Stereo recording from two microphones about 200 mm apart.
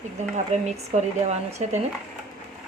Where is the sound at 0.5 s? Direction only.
35° right (ahead or behind).